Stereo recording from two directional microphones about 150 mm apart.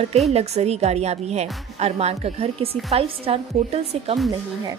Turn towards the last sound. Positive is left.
turn(degrees=-45)  # may be behind; listen again after turning